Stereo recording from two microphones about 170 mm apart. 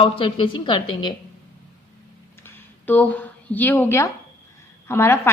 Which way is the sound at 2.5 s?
10° left (ahead or behind).